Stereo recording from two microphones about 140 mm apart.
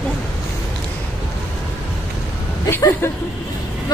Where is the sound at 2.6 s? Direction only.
15° left (ahead or behind).